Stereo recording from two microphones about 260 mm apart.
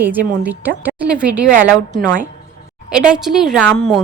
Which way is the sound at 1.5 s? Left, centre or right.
Right.